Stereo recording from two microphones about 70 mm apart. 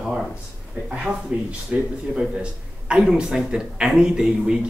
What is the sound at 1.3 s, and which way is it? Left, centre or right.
Speech, centre.